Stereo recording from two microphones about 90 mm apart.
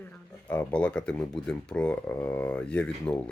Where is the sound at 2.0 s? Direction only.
20° left (ahead or behind).